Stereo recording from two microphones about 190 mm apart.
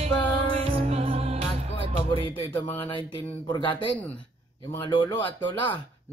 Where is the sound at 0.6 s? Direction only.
30° right (ahead or behind).